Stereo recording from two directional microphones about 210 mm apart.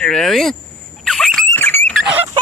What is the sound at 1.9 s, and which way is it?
Rodents, 5° right (ahead or behind).